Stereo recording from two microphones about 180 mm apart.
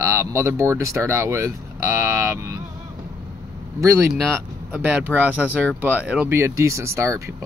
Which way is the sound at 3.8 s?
15° right (ahead or behind).